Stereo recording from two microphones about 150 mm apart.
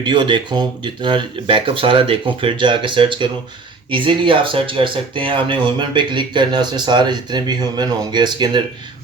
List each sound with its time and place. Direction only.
0.0 s speech: 30° right (ahead or behind)